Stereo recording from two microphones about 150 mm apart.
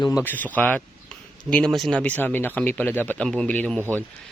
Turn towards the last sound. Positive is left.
turn(degrees=-15)  # may be behind; listen again after turning